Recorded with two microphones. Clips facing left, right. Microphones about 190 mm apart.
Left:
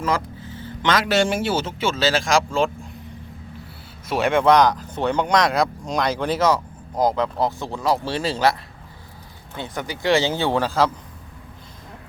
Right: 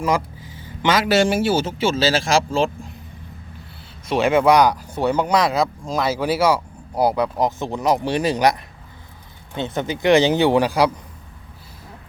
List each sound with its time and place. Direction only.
0.0 s speech: 10° right (ahead or behind)
1.8 s speech: 35° right (ahead or behind)
4.0 s speech: centre (ahead or behind); by 8.5 s 15° right (ahead or behind)
9.6 s speech: 25° right (ahead or behind)